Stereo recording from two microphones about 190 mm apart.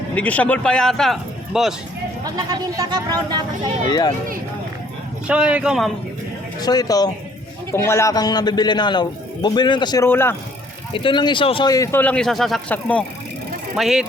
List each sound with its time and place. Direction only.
0.2 s speech: 10° left (ahead or behind)
2.2 s speech: 20° right (ahead or behind)
3.8 s a man's voice: 20° left (ahead or behind)
5.3 s speech: 5° right (ahead or behind)
6.6 s a man's voice: 20° left (ahead or behind)
10.9 s a man's voice: 25° left (ahead or behind); by 14.1 s centre (ahead or behind)